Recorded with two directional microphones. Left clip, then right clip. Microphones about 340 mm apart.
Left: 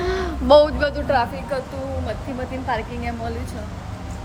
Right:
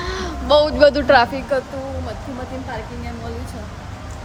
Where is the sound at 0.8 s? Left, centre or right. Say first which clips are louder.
Right 8 dB; centre.